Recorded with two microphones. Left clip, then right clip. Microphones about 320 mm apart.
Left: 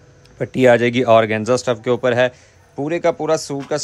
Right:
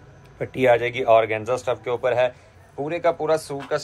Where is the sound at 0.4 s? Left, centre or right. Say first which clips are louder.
Left 5 dB; left.